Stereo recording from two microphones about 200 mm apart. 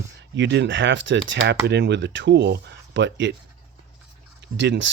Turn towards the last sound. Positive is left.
turn(degrees=-65)  # may be behind; listen again after turning